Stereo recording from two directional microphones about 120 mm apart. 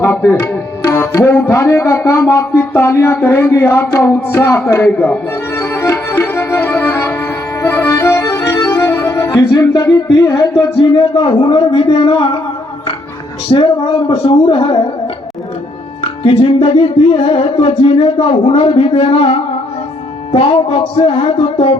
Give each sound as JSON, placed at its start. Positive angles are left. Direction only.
{"t": 0.0, "sound": "tabla", "side_deg": 25}
{"t": 10.9, "sound": "a man's voice", "side_deg": 40}
{"t": 13.5, "sound": "music", "side_deg": 45}